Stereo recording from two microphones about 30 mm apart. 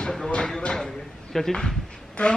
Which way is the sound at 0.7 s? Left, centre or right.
Centre.